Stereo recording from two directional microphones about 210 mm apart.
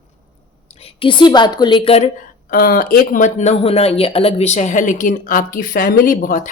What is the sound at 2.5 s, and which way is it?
Speech, 45° left (ahead or behind).